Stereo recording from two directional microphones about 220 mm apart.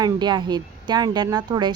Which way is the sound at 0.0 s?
20° right (ahead or behind).